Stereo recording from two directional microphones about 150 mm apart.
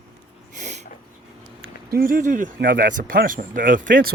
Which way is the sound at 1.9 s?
70° right (ahead or behind).